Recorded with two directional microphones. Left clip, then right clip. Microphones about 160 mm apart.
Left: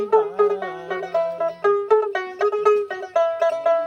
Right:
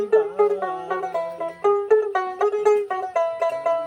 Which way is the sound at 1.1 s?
5° left (ahead or behind).